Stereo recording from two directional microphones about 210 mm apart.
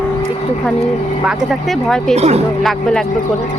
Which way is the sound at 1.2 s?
5° right (ahead or behind).